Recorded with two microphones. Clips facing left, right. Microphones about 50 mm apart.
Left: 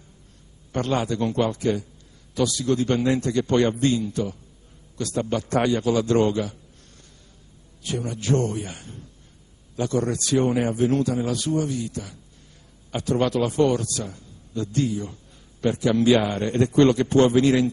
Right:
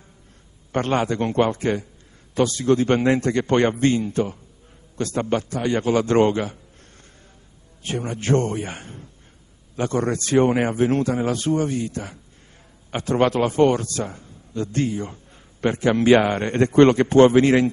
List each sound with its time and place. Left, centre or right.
0.7 s a man's voice: right